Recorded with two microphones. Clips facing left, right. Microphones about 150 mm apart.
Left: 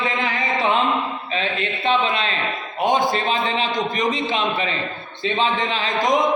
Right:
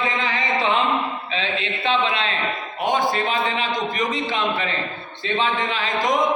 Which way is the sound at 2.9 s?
25° left (ahead or behind).